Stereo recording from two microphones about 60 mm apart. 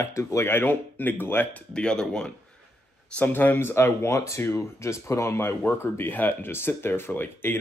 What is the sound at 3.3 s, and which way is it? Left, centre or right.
Speech, left.